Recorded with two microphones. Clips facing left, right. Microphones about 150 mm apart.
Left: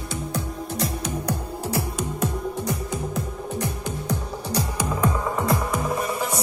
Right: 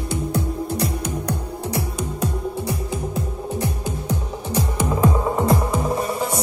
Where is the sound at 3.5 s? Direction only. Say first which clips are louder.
Right 3 dB; 15° right (ahead or behind).